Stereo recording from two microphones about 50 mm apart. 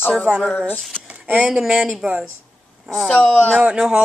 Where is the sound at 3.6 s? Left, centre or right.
Centre.